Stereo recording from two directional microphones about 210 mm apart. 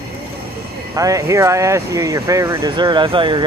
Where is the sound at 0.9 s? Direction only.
15° right (ahead or behind).